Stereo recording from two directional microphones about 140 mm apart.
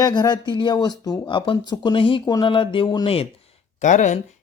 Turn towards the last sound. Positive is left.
turn(degrees=60)  # may be behind; listen again after turning